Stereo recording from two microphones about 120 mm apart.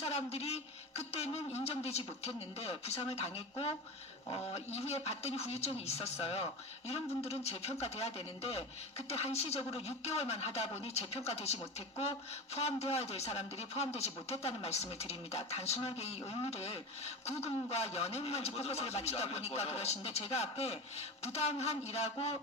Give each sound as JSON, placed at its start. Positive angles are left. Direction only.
{"t": 0.0, "sound": "speech", "side_deg": 55}